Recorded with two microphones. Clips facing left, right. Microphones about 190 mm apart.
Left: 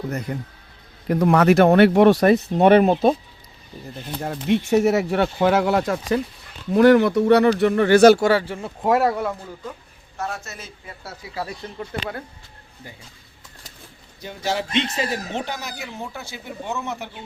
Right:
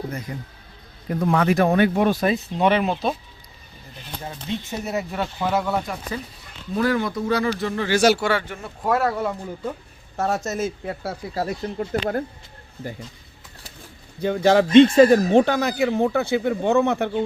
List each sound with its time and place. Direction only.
0.1 s speech: 65° left (ahead or behind)
2.6 s speech: 50° left (ahead or behind)
4.2 s speech: 65° left (ahead or behind); by 6.1 s 80° left
6.7 s speech: 70° left (ahead or behind); by 9.2 s 15° left (ahead or behind)
10.2 s speech: 40° right (ahead or behind)
10.8 s speech: 55° right (ahead or behind)
14.2 s speech: 55° right (ahead or behind)